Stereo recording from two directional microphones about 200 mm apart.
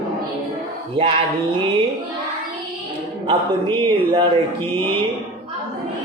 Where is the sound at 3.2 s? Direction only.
25° right (ahead or behind).